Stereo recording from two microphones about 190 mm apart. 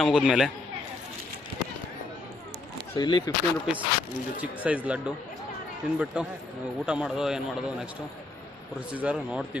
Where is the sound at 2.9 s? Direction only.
25° left (ahead or behind).